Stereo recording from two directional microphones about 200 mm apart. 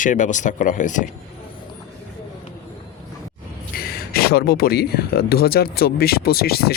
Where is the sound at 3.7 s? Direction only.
50° left (ahead or behind).